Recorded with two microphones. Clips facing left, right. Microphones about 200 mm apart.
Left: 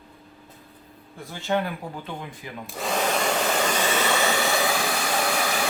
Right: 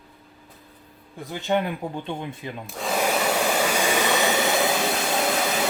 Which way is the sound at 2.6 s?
Centre (ahead or behind).